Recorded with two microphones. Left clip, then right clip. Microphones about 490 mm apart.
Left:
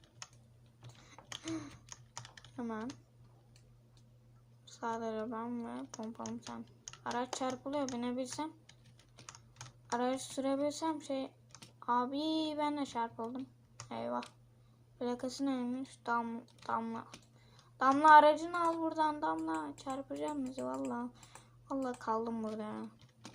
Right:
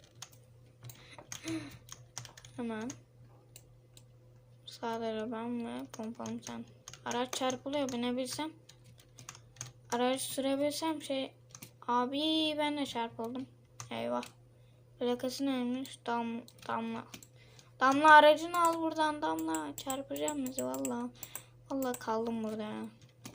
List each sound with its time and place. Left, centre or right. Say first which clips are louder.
1.5 s typing: right 3 dB; left
2.6 s speech: right 2 dB; left
4.6 s speech: right 2 dB; left
9.8 s speech: right 3 dB; left